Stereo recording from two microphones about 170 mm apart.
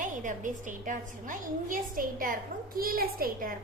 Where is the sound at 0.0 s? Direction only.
50° right (ahead or behind).